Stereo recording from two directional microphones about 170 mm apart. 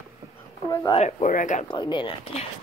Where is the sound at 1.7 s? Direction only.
25° left (ahead or behind).